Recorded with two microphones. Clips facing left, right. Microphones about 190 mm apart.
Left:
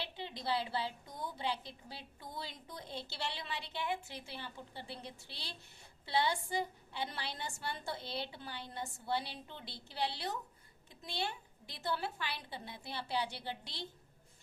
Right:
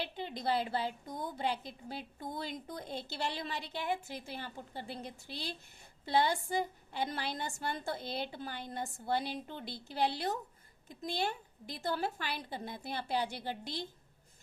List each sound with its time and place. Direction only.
0.0 s a woman's voice: 50° right (ahead or behind)